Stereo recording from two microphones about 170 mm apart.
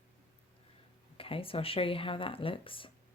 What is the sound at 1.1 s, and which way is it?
Speech, 35° left (ahead or behind).